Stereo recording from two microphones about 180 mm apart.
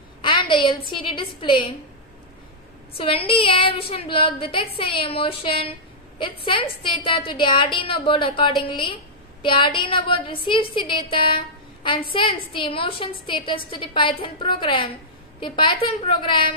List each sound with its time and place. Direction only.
0.2 s a woman's voice: 30° left (ahead or behind)
3.0 s a woman's voice: 30° left (ahead or behind)